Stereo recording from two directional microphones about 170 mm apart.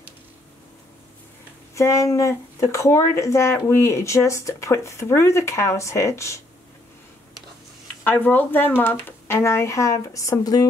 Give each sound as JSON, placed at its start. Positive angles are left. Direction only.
{"t": 1.8, "sound": "speech", "side_deg": 15}
{"t": 8.0, "sound": "speech", "side_deg": 10}